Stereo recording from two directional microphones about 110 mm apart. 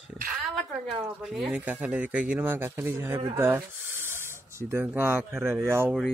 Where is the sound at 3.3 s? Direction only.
20° right (ahead or behind).